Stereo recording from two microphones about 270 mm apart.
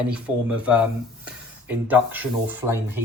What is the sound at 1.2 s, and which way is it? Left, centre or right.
Speech, centre.